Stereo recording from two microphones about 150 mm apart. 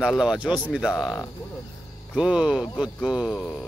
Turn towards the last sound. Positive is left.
turn(degrees=0)  # may be behind; listen again after turning